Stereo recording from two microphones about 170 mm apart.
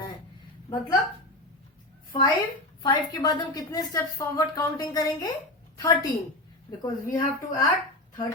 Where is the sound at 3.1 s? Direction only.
20° left (ahead or behind).